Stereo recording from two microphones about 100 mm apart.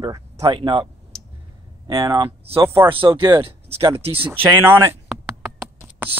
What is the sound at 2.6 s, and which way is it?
Speech, 25° right (ahead or behind).